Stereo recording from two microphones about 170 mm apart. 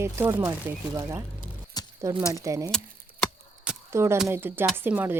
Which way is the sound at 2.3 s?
20° right (ahead or behind).